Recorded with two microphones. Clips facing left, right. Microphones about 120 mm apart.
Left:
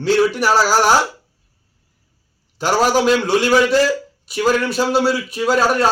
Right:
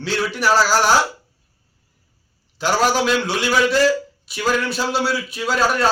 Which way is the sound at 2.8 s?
45° left (ahead or behind).